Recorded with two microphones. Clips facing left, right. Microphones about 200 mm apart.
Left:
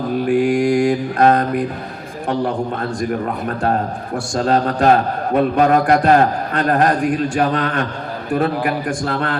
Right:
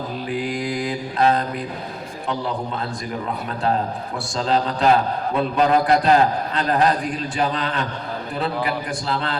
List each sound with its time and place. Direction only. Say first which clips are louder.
0.3 s a man's voice: left 11 dB; 50° left (ahead or behind)